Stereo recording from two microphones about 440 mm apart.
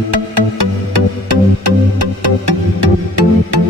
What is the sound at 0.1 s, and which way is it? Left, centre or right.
Music, right.